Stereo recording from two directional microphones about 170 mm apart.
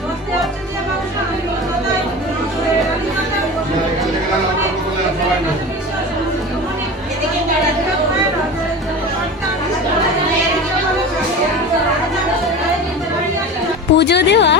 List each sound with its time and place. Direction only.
13.9 s a woman's voice: 90° left